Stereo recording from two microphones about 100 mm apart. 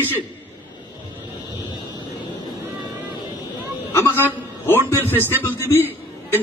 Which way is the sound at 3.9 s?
25° left (ahead or behind).